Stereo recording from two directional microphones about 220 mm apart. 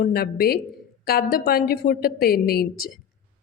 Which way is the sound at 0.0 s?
45° left (ahead or behind).